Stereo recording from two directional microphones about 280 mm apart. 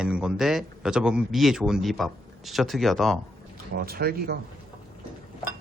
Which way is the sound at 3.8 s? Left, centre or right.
Right.